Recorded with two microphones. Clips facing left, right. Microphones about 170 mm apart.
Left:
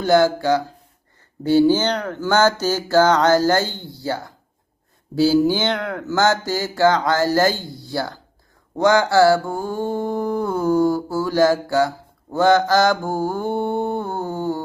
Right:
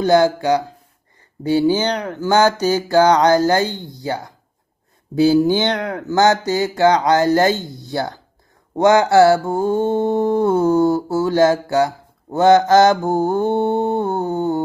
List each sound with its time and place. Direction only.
0.0 s mantra: 20° right (ahead or behind)
1.4 s speech: 10° right (ahead or behind)
5.1 s mantra: 20° right (ahead or behind)